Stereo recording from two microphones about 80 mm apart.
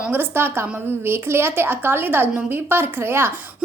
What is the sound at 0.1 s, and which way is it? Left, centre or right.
A woman's voice, right.